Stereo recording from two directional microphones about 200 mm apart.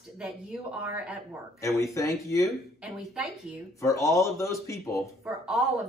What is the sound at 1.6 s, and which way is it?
Speech, 15° left (ahead or behind).